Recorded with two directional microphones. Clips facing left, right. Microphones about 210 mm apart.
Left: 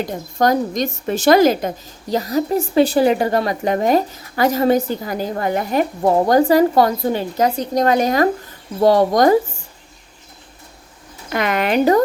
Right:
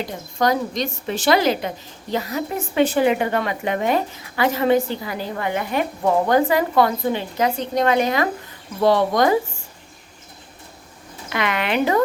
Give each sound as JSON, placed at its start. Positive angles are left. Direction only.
{"t": 0.0, "sound": "a woman's voice", "side_deg": 45}
{"t": 11.3, "sound": "speech", "side_deg": 45}